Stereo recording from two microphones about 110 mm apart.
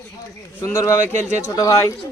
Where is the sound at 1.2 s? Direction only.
90° right.